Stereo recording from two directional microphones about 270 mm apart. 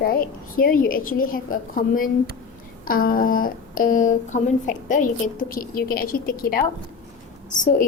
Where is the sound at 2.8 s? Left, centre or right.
Left.